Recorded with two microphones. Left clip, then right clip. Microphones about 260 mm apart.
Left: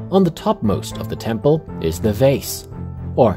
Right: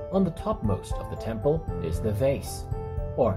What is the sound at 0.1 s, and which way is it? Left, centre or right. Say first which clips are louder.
Speech: left 11 dB; left.